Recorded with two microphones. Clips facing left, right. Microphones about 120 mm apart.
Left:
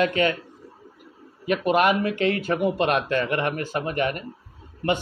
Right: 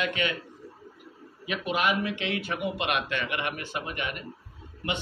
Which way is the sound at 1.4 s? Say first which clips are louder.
Left 8 dB; 50° left (ahead or behind).